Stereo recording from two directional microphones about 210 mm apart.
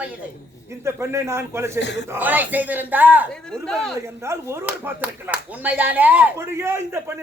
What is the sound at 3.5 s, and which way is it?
Speech, 5° left (ahead or behind).